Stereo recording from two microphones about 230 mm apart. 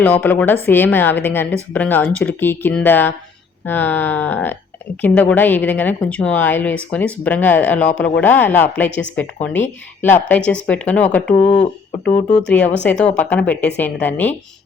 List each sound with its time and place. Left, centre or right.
0.0 s a woman's voice: centre
11.4 s speech: left
12.5 s a woman's voice: centre